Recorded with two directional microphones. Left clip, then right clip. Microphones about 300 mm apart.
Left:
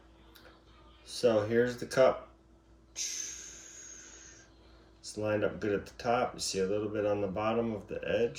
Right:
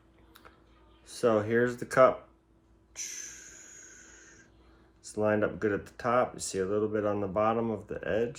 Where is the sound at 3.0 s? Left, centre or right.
Centre.